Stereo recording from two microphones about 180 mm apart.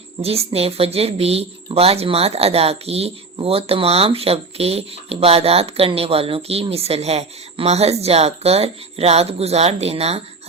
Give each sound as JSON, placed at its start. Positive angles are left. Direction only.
{"t": 0.2, "sound": "speech", "side_deg": -35}